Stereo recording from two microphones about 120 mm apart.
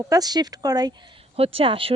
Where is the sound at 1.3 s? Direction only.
55° right (ahead or behind).